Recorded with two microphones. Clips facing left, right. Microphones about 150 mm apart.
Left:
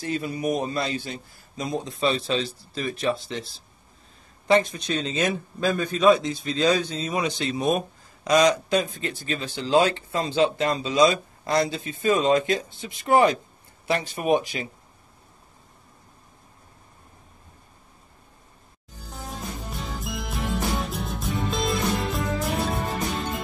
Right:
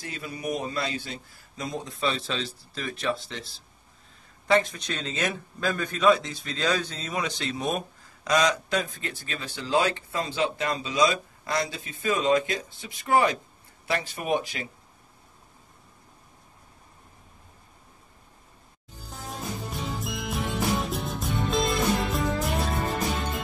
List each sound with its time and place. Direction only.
0.0 s speech: 25° left (ahead or behind)
4.5 s speech: 20° left (ahead or behind)
19.0 s music: centre (ahead or behind)